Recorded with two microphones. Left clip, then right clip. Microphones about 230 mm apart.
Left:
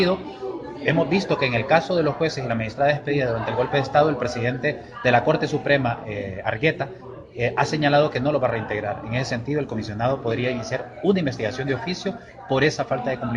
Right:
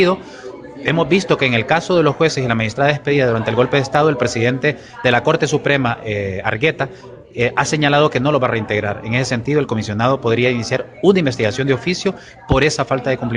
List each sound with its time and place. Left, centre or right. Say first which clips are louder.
0.9 s speech: right 6 dB; right